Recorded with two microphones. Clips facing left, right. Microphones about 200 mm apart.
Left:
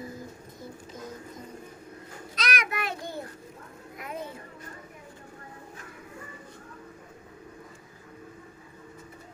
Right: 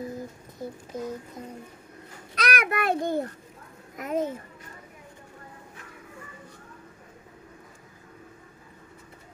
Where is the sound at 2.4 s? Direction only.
60° right (ahead or behind).